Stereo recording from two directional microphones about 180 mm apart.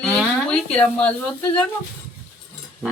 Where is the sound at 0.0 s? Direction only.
5° left (ahead or behind).